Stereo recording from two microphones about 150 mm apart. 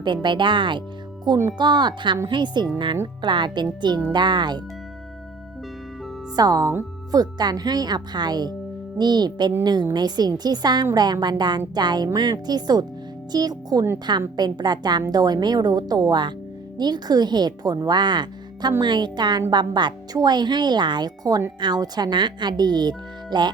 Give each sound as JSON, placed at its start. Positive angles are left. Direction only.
{"t": 0.0, "sound": "a woman's voice", "side_deg": -30}
{"t": 6.3, "sound": "a woman's voice", "side_deg": -25}